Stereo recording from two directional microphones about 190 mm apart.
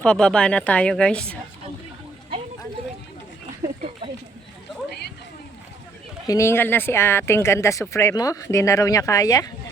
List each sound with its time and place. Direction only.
0.0 s a woman's voice: 5° left (ahead or behind)
4.9 s a sound: 60° left (ahead or behind)
6.2 s speech: 15° left (ahead or behind)